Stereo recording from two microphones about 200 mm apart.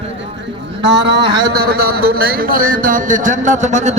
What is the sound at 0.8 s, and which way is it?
A man's voice, 60° right (ahead or behind).